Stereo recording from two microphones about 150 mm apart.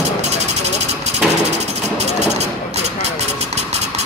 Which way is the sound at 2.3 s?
45° right (ahead or behind).